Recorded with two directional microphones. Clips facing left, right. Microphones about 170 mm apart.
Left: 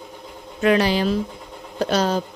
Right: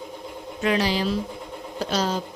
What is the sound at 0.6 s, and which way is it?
Speech, 55° left (ahead or behind).